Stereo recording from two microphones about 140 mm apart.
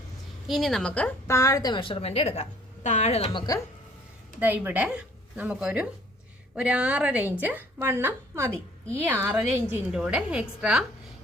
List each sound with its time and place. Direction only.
0.4 s a woman's voice: centre (ahead or behind)
1.3 s a woman's voice: 25° left (ahead or behind); by 3.4 s 45° left (ahead or behind)
4.4 s a woman's voice: 15° right (ahead or behind)
8.4 s a woman's voice: 10° left (ahead or behind)
9.0 s a woman's voice: 15° right (ahead or behind)